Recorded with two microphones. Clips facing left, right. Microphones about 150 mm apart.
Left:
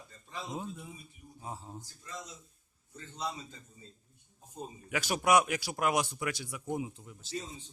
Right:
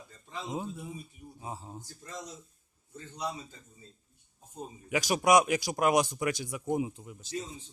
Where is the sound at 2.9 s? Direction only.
15° right (ahead or behind).